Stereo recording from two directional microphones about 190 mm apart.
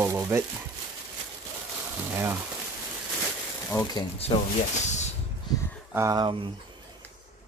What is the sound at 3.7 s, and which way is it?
Speech, 15° left (ahead or behind).